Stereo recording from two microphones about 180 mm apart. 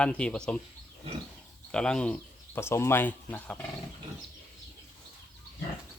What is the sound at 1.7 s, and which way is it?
Speech, 5° left (ahead or behind).